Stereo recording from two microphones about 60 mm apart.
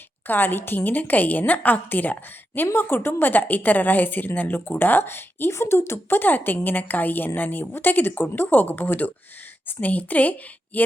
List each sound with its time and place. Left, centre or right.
0.3 s a woman's voice: left